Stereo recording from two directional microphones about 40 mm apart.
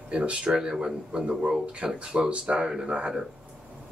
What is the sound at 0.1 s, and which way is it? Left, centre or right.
A man's voice, right.